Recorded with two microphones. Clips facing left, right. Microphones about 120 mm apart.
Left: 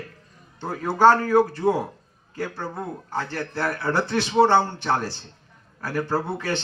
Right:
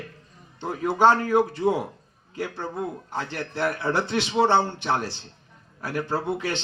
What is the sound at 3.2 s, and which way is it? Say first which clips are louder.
A man's voice: even; 15° right (ahead or behind).